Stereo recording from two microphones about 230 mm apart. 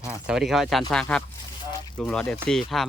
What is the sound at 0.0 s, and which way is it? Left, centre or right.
Speech, centre.